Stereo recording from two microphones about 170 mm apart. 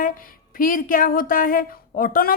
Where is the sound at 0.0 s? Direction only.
55° left (ahead or behind).